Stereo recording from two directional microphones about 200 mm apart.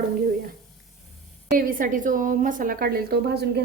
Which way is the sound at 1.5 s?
40° right (ahead or behind).